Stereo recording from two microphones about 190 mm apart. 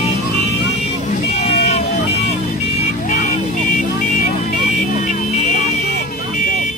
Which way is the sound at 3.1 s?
40° left (ahead or behind).